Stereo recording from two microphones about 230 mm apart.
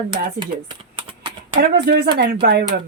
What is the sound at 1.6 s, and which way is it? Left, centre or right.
A woman's voice, right.